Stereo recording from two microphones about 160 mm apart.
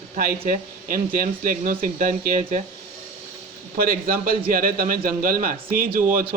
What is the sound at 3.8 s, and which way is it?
Speech, 65° right (ahead or behind).